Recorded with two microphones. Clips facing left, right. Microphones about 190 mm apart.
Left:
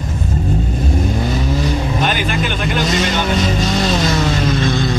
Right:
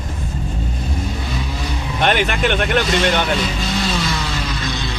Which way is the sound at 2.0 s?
70° right (ahead or behind).